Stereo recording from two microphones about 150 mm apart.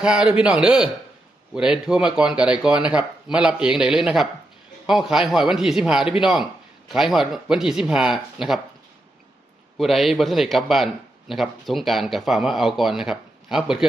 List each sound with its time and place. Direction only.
0.0 s a man's voice: 5° right (ahead or behind)
9.7 s a man's voice: centre (ahead or behind)